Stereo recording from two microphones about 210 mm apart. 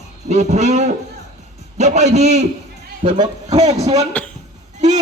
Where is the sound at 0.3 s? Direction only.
35° right (ahead or behind).